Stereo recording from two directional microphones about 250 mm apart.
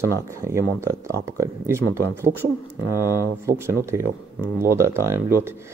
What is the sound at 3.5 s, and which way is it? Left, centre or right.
Speech, centre.